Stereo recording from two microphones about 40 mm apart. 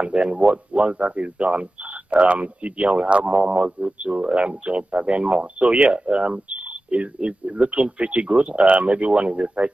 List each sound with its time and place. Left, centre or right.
0.0 s speech: right